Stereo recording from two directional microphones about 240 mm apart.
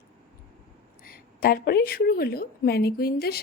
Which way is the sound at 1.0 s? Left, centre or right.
Left.